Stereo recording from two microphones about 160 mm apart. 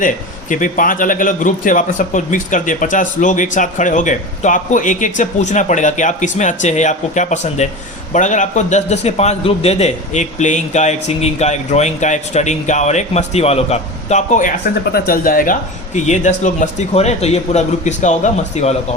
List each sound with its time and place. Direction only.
0.0 s a man's voice: 55° left (ahead or behind)
16.0 s a man's voice: 50° left (ahead or behind)